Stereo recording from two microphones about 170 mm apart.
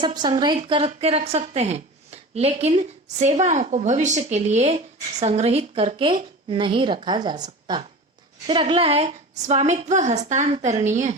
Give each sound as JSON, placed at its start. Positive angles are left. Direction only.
{"t": 0.0, "sound": "a woman's voice", "side_deg": -25}